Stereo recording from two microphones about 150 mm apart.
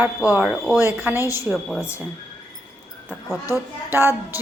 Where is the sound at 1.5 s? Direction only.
5° left (ahead or behind).